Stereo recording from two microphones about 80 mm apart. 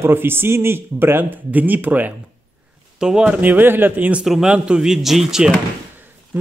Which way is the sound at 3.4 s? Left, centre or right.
Right.